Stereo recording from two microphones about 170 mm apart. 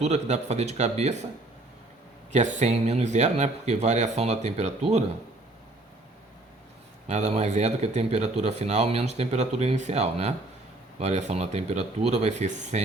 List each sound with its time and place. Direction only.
0.0 s speech: 40° right (ahead or behind)
2.3 s speech: 45° right (ahead or behind)
7.1 s speech: 45° right (ahead or behind)